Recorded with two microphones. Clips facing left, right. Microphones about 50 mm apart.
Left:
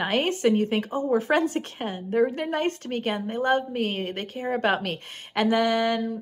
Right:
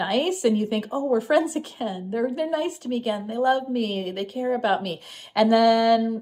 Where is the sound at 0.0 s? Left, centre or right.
Left.